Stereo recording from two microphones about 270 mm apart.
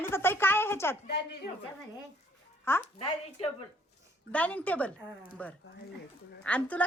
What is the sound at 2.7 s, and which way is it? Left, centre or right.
Speech, centre.